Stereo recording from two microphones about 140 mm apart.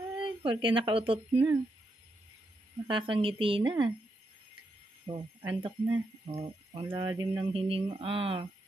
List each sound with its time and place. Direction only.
0.2 s speech: 40° right (ahead or behind)
2.9 s music: 40° right (ahead or behind)
5.0 s speech: 35° right (ahead or behind)
5.9 s music: 25° right (ahead or behind); by 8.5 s 40° right (ahead or behind)